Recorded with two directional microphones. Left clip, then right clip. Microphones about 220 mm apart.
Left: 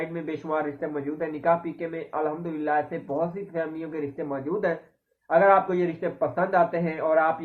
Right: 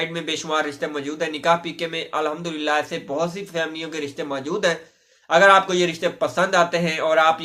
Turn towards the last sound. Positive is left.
turn(degrees=-30)  # may be behind; listen again after turning